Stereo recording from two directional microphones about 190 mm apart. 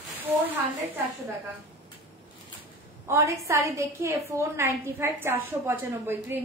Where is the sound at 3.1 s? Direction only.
15° right (ahead or behind).